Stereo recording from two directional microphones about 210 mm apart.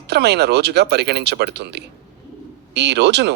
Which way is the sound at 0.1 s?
50° right (ahead or behind).